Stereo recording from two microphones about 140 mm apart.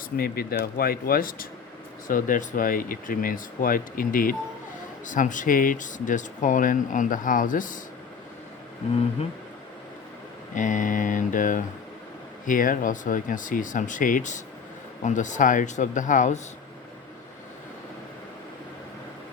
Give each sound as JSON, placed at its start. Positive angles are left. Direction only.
{"t": 0.2, "sound": "speech", "side_deg": 90}
{"t": 2.0, "sound": "speech", "side_deg": 70}
{"t": 5.0, "sound": "speech", "side_deg": 65}
{"t": 10.5, "sound": "speech", "side_deg": 65}